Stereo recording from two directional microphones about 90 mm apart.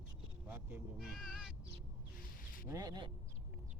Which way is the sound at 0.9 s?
Centre (ahead or behind).